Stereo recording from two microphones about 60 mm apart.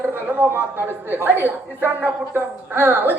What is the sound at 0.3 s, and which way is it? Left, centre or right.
A woman's voice, right.